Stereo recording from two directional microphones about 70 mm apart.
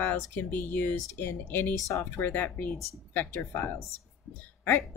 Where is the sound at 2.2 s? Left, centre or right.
Left.